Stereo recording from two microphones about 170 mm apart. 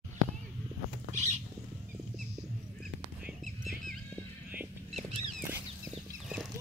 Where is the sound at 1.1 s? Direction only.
45° right (ahead or behind).